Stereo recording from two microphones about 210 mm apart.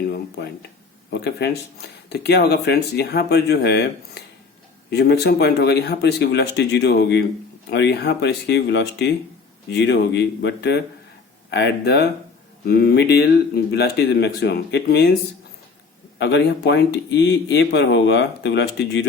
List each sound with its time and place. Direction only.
1.2 s speech: 50° left (ahead or behind)
16.1 s speech: 55° left (ahead or behind)